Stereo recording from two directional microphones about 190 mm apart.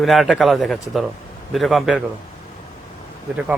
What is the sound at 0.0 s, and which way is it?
Speech, centre (ahead or behind).